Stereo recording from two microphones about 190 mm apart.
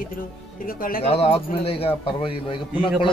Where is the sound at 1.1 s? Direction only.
30° left (ahead or behind).